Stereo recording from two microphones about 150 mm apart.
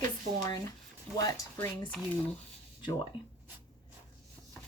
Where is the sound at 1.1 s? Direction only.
20° left (ahead or behind).